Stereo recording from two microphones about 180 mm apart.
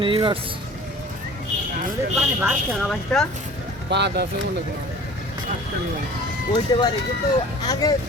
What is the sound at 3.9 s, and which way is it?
Speech, 70° right (ahead or behind).